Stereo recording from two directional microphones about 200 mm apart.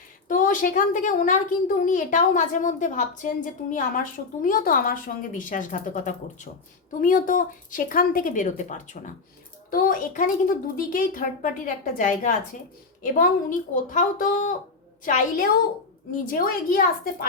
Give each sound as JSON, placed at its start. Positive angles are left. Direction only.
{"t": 0.3, "sound": "a woman's voice", "side_deg": 40}